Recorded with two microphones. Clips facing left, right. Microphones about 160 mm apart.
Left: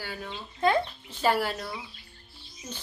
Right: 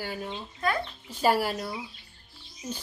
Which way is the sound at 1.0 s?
10° right (ahead or behind).